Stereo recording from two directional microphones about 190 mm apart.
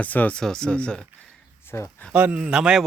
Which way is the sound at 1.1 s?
5° left (ahead or behind).